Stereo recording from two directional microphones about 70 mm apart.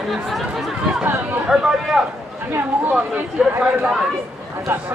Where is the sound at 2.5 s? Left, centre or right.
Right.